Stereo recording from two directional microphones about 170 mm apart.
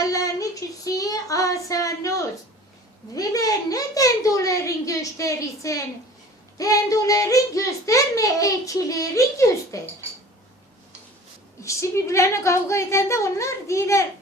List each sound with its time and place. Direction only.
0.0 s a sound: 20° left (ahead or behind)
0.9 s child singing: 20° left (ahead or behind)
3.2 s a child's voice: 20° left (ahead or behind)
11.6 s a woman's voice: 15° left (ahead or behind)